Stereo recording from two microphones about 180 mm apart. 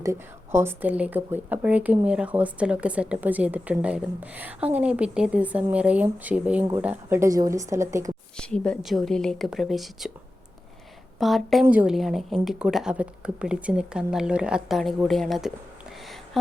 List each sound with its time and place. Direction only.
0.0 s speech: 15° right (ahead or behind)
8.4 s a woman's voice: 5° left (ahead or behind)
11.2 s a woman's voice: centre (ahead or behind)